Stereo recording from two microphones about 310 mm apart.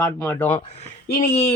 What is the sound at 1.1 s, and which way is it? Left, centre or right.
Speech, left.